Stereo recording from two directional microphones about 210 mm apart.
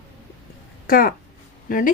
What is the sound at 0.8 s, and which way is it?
Speech, 45° left (ahead or behind).